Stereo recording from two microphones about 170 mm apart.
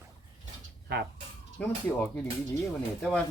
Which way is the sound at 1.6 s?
5° left (ahead or behind).